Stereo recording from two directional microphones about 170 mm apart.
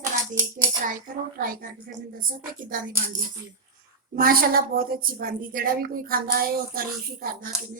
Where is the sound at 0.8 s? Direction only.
55° right (ahead or behind).